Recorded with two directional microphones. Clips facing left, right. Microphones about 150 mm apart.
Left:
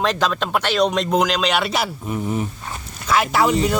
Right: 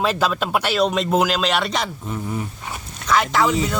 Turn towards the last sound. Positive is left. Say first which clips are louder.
# left 1 dB
turn(degrees=5)  # may be behind; listen again after turning